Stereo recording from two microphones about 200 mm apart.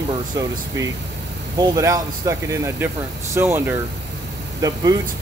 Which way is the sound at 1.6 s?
15° right (ahead or behind).